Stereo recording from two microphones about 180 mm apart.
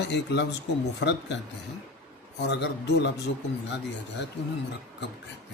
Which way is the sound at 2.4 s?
70° left (ahead or behind).